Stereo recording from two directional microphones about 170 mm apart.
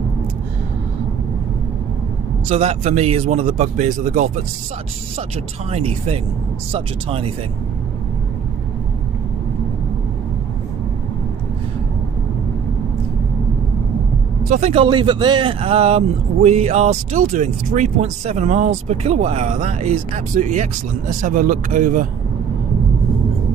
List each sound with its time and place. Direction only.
2.5 s speech: 35° right (ahead or behind)
5.7 s speech: 35° right (ahead or behind)
14.5 s speech: 35° right (ahead or behind)